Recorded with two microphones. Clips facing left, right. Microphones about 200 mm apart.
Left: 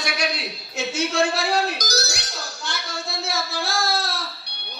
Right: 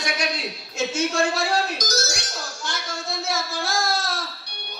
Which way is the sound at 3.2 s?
65° left (ahead or behind).